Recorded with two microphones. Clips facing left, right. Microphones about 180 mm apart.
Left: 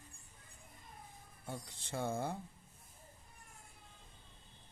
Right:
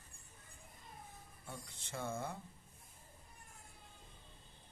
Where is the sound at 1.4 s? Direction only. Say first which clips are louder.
Left 5 dB; 35° left (ahead or behind).